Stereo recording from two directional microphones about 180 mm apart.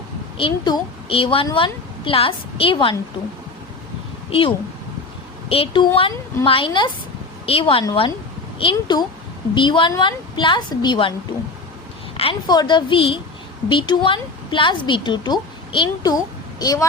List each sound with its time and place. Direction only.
0.3 s a woman's voice: 25° left (ahead or behind)
4.3 s a woman's voice: 30° left (ahead or behind)
12.1 s a woman's voice: 30° left (ahead or behind)